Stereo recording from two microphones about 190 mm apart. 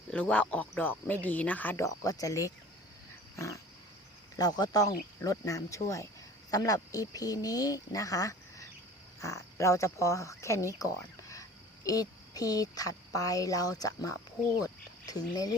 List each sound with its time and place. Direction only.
0.1 s a woman's voice: 5° left (ahead or behind)